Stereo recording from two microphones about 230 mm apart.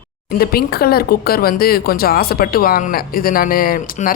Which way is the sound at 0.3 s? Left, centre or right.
Left.